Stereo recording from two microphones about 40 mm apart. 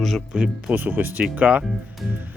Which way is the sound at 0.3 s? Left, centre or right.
Right.